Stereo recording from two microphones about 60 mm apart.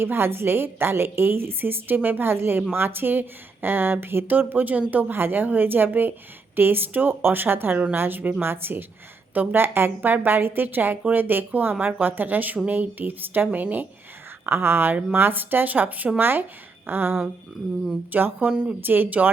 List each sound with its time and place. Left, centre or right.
0.0 s speech: right
14.4 s speech: right
18.1 s speech: right
18.8 s speech: right